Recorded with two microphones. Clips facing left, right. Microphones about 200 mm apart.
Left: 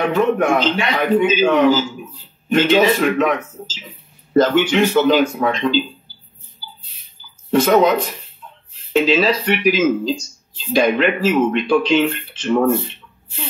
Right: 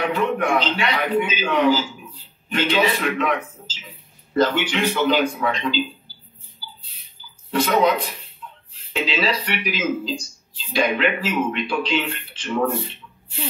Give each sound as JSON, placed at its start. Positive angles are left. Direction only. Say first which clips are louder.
{"t": 0.1, "sound": "speech", "louder": "left 5 dB", "side_deg": 45}
{"t": 7.5, "sound": "speech", "louder": "left 5 dB", "side_deg": 45}